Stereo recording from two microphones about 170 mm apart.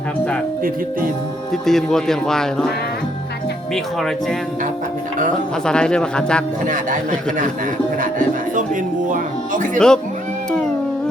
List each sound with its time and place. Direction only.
1.6 s speech: centre (ahead or behind)
5.6 s speech: 5° left (ahead or behind)
6.7 s a man's voice: 50° right (ahead or behind)
8.5 s music: 50° right (ahead or behind)
9.7 s speech: 5° left (ahead or behind)